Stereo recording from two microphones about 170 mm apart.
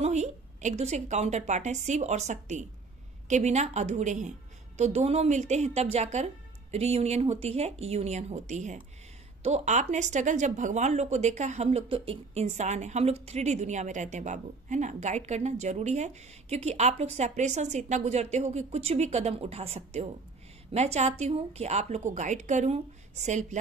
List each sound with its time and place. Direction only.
0.0 s a woman's voice: 45° right (ahead or behind)